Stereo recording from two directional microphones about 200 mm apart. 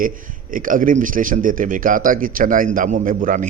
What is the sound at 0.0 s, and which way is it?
A man's voice, 45° right (ahead or behind).